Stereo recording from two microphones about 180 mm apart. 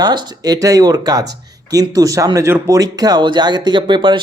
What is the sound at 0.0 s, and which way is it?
Speech, 20° right (ahead or behind).